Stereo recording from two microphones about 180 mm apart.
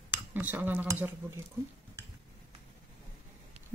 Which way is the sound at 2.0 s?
20° right (ahead or behind).